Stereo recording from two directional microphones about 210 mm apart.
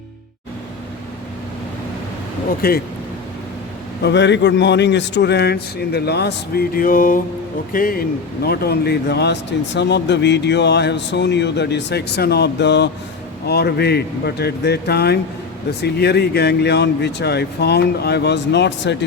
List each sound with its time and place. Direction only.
2.6 s a man's voice: 45° left (ahead or behind)
4.0 s a man's voice: 55° left (ahead or behind)